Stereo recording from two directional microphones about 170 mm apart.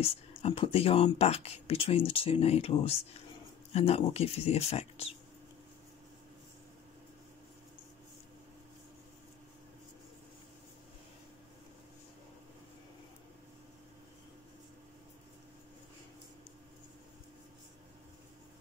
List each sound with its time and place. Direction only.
0.0 s speech: 35° left (ahead or behind)